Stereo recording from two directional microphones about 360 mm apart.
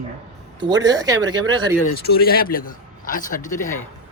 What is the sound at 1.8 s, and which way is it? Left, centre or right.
A man's voice, left.